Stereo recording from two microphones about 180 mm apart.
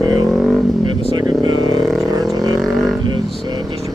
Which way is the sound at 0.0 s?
20° right (ahead or behind).